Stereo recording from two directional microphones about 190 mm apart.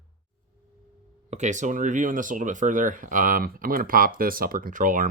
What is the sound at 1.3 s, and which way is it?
Speech, 40° right (ahead or behind).